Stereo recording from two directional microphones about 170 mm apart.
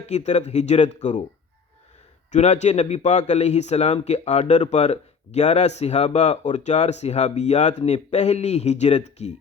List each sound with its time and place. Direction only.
0.0 s speech: 40° left (ahead or behind)
2.3 s a man's voice: 45° left (ahead or behind)